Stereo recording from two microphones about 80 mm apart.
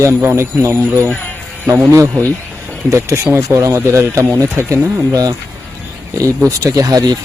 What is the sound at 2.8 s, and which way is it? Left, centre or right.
Speech, right.